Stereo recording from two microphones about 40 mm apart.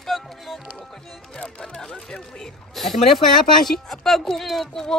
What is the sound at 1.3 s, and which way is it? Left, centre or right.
Speech, left.